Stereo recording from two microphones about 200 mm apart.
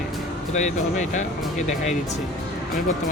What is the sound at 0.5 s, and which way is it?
Speech, 35° left (ahead or behind).